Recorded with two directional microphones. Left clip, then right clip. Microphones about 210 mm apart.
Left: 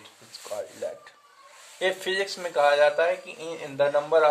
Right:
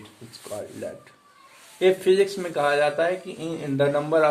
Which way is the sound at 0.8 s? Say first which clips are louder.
Left 1 dB; 20° left (ahead or behind).